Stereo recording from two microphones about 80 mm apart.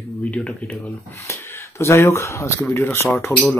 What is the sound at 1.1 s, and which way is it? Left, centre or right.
Speech, left.